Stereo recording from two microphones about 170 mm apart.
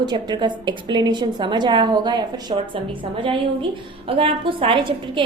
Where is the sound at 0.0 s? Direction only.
25° right (ahead or behind).